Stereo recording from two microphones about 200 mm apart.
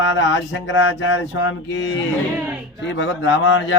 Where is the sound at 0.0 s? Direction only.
65° left (ahead or behind).